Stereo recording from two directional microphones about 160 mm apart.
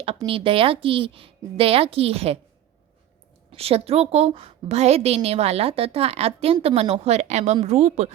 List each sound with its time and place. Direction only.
0.3 s a woman's voice: 35° right (ahead or behind)
3.5 s a woman's voice: 40° right (ahead or behind)